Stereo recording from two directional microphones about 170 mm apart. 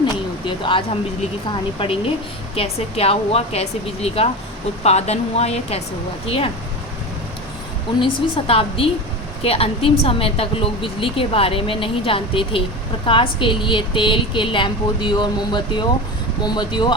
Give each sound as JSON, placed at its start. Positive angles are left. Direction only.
{"t": 0.0, "sound": "a sound", "side_deg": 30}
{"t": 1.5, "sound": "speech", "side_deg": 30}
{"t": 8.4, "sound": "a woman's voice", "side_deg": 35}